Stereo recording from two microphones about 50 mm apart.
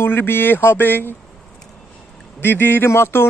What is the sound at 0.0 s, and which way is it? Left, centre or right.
Speech, left.